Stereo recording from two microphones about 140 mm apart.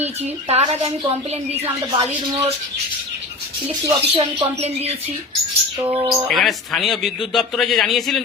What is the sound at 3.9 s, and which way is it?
Speech, 35° right (ahead or behind).